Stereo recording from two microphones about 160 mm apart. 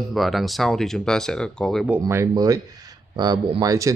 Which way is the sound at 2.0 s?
20° right (ahead or behind).